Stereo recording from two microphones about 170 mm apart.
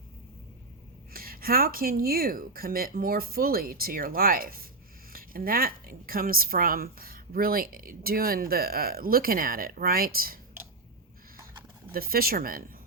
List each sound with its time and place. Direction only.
1.1 s a woman's voice: 60° right (ahead or behind)
11.9 s a woman's voice: 60° right (ahead or behind)